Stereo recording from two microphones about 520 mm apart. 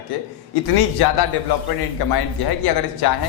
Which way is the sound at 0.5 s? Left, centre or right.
Left.